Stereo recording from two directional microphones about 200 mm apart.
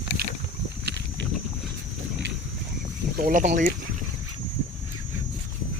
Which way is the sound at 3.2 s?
45° right (ahead or behind).